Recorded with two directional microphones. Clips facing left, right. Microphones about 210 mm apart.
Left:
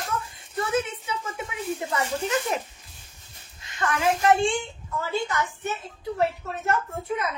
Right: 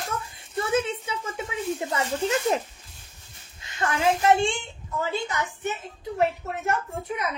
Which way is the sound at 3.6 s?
25° right (ahead or behind).